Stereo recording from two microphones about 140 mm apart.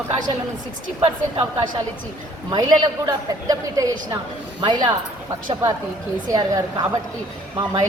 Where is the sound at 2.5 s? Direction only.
30° right (ahead or behind).